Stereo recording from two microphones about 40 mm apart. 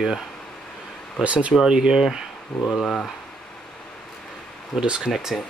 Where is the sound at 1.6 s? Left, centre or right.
Centre.